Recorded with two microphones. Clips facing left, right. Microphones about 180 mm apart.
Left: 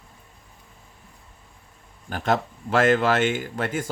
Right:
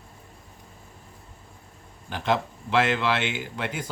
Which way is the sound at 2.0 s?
45° left (ahead or behind).